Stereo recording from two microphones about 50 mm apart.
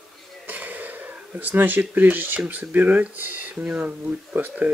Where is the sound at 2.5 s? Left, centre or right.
Right.